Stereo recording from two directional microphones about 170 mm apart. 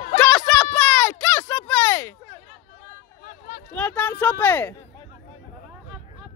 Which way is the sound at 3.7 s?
10° left (ahead or behind).